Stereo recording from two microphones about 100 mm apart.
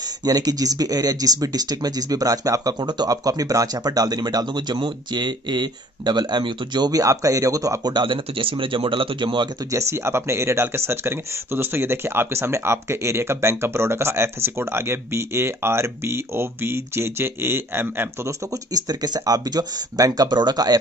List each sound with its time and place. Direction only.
0.2 s speech: 40° right (ahead or behind)
7.9 s speech: 55° right (ahead or behind)
9.7 s speech: 30° right (ahead or behind)
18.7 s speech: 40° right (ahead or behind)